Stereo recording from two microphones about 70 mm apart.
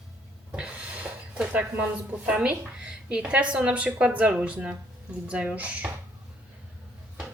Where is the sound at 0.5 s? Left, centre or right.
Centre.